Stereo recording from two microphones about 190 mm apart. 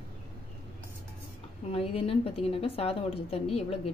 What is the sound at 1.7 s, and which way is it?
Speech, 30° left (ahead or behind).